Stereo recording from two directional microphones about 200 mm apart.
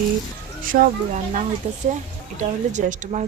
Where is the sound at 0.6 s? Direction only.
45° right (ahead or behind).